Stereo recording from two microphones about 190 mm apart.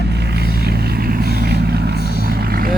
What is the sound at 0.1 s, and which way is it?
Vehicle, 60° right (ahead or behind).